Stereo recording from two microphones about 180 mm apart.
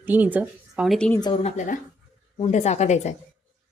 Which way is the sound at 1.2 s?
25° left (ahead or behind).